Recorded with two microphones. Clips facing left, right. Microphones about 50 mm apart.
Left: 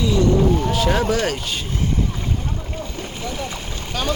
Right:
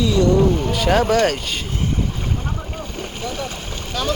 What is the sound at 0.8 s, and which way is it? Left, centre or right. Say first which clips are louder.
Speech: right 6 dB; right.